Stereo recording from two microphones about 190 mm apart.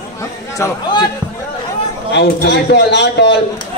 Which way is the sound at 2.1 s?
65° left (ahead or behind).